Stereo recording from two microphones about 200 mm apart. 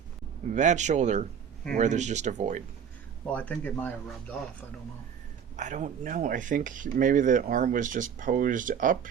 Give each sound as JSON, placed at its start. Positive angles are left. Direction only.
{"t": 0.5, "sound": "speech", "side_deg": -35}
{"t": 3.2, "sound": "speech", "side_deg": 5}
{"t": 5.5, "sound": "speech", "side_deg": -40}